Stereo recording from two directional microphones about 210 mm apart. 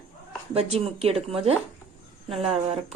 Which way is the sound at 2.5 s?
30° right (ahead or behind).